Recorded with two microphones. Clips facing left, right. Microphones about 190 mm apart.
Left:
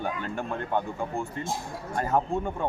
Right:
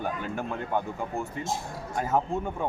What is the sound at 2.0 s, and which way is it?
Speech, 5° right (ahead or behind).